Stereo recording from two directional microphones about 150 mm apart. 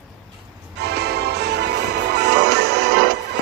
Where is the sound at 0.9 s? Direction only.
90° right.